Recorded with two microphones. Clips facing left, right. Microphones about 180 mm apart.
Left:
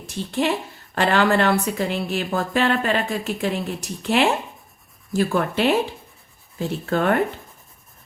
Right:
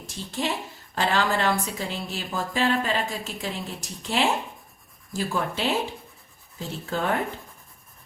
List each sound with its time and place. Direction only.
0.1 s a woman's voice: 65° left (ahead or behind)